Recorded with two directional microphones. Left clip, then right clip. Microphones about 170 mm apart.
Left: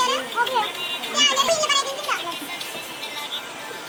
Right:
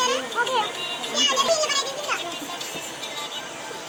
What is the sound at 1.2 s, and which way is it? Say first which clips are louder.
Speech: left 2 dB; 20° right (ahead or behind).